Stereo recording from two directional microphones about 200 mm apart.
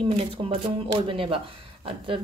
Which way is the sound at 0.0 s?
30° right (ahead or behind).